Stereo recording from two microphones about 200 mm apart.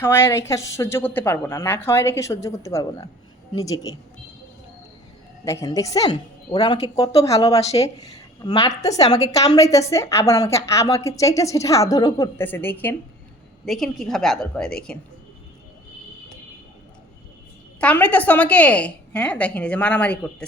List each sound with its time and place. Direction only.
0.3 s a woman's voice: 15° left (ahead or behind)
5.5 s a woman's voice: 15° left (ahead or behind)
17.7 s a woman's voice: 5° left (ahead or behind)